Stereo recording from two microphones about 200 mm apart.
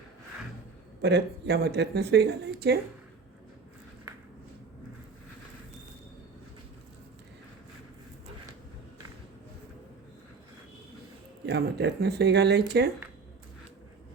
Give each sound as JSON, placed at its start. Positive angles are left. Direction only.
{"t": 1.0, "sound": "speech", "side_deg": -55}
{"t": 11.4, "sound": "speech", "side_deg": -55}